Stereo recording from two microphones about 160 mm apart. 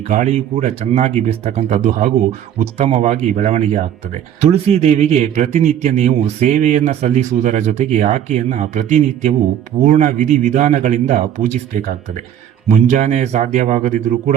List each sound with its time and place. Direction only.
0.1 s speech: 45° right (ahead or behind)